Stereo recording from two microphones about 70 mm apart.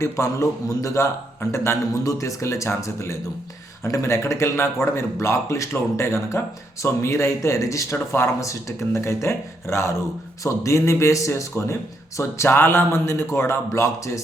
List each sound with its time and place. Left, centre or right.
0.0 s a man's voice: left